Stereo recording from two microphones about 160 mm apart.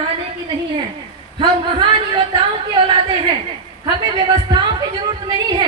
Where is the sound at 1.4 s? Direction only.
30° right (ahead or behind).